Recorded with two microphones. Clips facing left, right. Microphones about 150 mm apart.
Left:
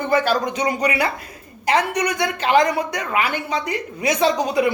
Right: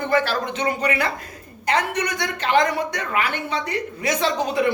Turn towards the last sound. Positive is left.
turn(degrees=15)  # may be behind; listen again after turning